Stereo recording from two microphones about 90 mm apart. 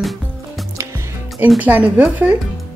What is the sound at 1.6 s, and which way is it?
Speech, 15° right (ahead or behind).